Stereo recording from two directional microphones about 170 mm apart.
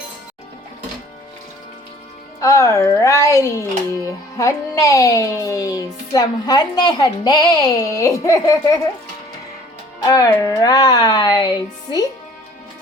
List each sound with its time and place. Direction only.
2.4 s a woman's voice: 15° left (ahead or behind)
10.1 s speech: 20° left (ahead or behind)